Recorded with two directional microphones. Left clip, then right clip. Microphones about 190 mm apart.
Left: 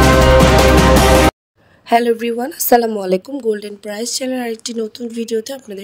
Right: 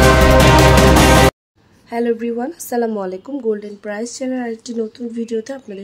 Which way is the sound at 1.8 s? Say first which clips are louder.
Left 5 dB; 40° left (ahead or behind).